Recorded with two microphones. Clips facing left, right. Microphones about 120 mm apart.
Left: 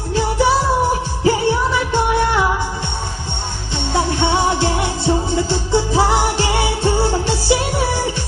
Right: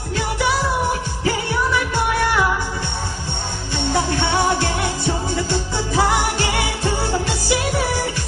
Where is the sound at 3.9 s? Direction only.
25° left (ahead or behind).